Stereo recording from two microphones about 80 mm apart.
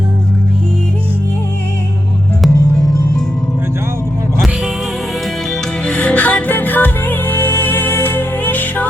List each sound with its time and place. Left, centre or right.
5.9 s music: centre